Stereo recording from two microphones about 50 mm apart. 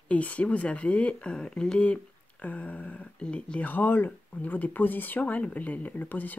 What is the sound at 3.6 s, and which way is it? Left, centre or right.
Speech, left.